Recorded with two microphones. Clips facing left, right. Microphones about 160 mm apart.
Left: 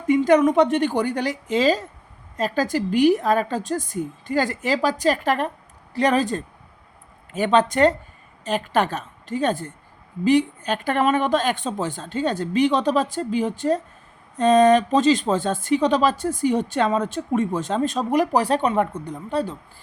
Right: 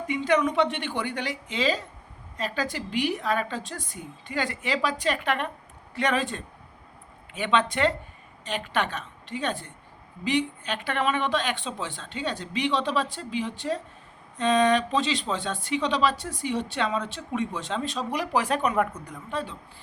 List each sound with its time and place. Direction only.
0.1 s a woman's voice: 45° left (ahead or behind)